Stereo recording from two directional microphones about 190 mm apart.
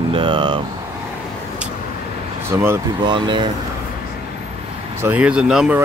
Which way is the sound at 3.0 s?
25° right (ahead or behind).